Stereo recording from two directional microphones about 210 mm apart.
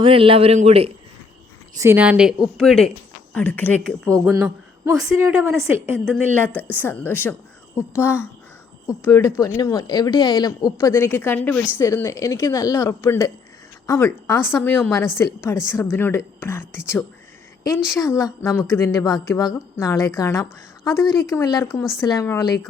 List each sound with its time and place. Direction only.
0.0 s a man's voice: 25° right (ahead or behind)
1.7 s a woman's voice: 10° right (ahead or behind); by 4.1 s 5° left (ahead or behind)
4.1 s a woman's voice: 15° right (ahead or behind)
6.6 s a woman's voice: 10° left (ahead or behind)